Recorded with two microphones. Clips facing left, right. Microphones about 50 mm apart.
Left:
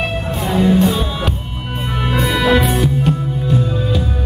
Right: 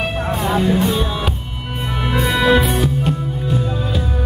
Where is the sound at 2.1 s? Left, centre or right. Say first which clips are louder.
Even; centre.